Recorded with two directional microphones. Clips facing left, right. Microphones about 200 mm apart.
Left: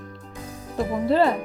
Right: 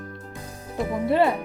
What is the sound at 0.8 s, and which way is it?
Music, centre (ahead or behind).